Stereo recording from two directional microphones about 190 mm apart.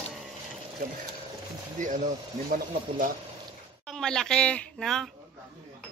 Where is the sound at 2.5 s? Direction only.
45° right (ahead or behind).